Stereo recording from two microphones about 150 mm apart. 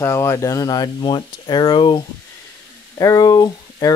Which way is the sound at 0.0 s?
20° left (ahead or behind).